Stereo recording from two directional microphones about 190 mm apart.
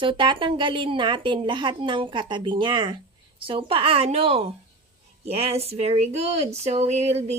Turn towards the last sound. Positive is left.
turn(degrees=-35)  # may be behind; listen again after turning